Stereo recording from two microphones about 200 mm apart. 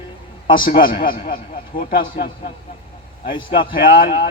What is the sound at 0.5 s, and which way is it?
A man's voice, 45° left (ahead or behind).